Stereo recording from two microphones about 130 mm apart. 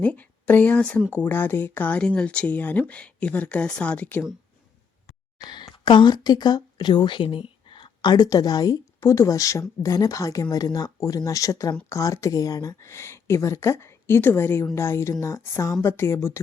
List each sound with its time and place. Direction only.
0.0 s speech: 10° left (ahead or behind)
5.5 s speech: 35° left (ahead or behind); by 16.4 s 20° left (ahead or behind)